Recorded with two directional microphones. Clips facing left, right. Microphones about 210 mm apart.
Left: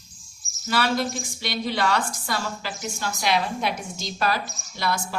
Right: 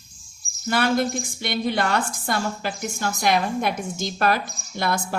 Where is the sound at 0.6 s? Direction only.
50° right (ahead or behind).